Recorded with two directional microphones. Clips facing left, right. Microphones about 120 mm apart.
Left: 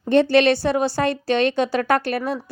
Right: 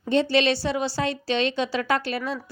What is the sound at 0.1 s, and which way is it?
A woman's voice, 55° left (ahead or behind).